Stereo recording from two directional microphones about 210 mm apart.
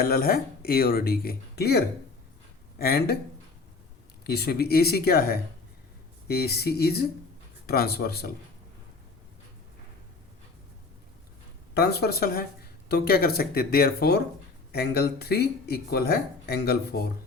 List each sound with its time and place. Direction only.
0.0 s speech: 45° left (ahead or behind)
4.2 s speech: 50° left (ahead or behind)
11.7 s speech: 50° left (ahead or behind)